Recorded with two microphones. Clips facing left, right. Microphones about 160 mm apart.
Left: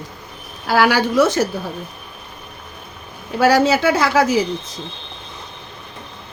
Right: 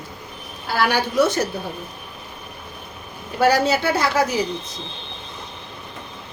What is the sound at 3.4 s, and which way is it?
Speech, 90° left.